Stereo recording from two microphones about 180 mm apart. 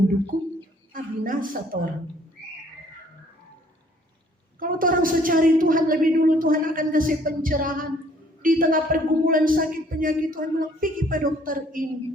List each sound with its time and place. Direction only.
0.9 s a woman's voice: 50° right (ahead or behind)
4.6 s a man's voice: 50° right (ahead or behind)